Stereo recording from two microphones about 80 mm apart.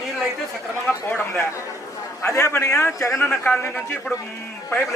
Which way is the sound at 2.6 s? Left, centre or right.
Left.